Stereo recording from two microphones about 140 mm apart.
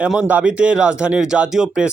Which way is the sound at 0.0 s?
5° right (ahead or behind).